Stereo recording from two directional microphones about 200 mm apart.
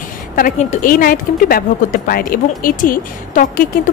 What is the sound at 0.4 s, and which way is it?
Speech, 40° left (ahead or behind).